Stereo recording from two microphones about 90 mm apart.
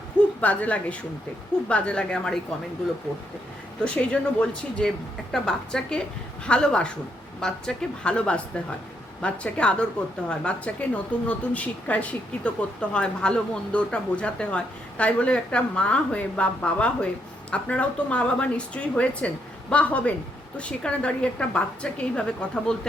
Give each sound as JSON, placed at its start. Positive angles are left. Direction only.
{"t": 0.4, "sound": "a woman's voice", "side_deg": 15}
{"t": 3.8, "sound": "a woman's voice", "side_deg": 15}